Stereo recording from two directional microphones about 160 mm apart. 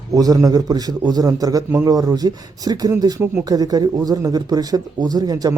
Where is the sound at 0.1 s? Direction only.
20° right (ahead or behind).